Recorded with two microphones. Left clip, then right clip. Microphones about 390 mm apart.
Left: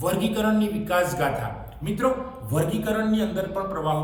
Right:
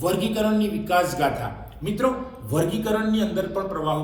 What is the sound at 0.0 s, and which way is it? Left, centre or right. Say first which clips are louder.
A man's voice: right 1 dB; centre.